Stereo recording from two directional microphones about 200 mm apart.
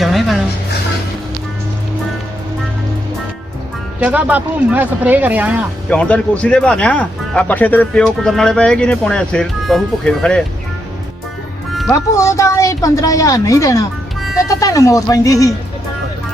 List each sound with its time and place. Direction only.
0.0 s music: centre (ahead or behind)
4.0 s speech: 10° right (ahead or behind)
5.9 s speech: 5° left (ahead or behind)
11.7 s music: centre (ahead or behind)
12.1 s a woman's voice: 15° left (ahead or behind)